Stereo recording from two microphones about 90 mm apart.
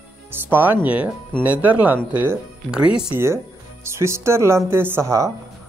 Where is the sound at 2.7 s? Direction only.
10° right (ahead or behind).